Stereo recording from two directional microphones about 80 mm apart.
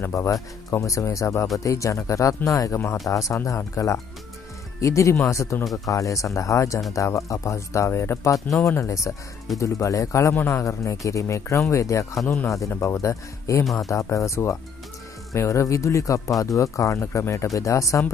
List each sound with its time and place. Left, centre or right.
0.0 s speech: left